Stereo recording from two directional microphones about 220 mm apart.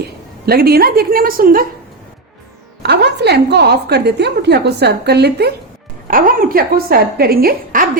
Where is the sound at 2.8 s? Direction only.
50° right (ahead or behind).